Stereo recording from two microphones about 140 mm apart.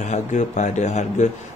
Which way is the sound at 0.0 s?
60° left (ahead or behind).